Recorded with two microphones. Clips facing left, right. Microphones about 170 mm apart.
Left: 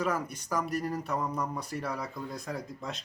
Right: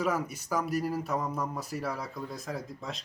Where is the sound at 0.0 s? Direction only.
10° right (ahead or behind).